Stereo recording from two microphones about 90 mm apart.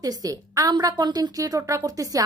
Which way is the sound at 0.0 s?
40° right (ahead or behind).